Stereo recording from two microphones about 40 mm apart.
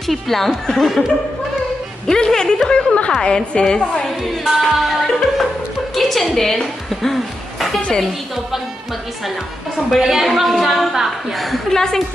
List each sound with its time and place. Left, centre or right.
0.0 s a woman's voice: centre
2.0 s speech: centre
2.7 s a woman's voice: left
4.6 s a woman's voice: centre
9.9 s a woman's voice: centre
11.7 s speech: centre